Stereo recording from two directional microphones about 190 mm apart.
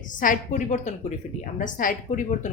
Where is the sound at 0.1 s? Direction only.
45° left (ahead or behind).